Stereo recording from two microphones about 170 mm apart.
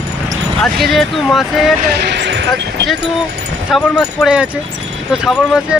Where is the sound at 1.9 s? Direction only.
85° right.